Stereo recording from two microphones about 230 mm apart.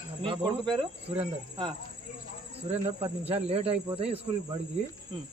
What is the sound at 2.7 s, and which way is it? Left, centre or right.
A man's voice, right.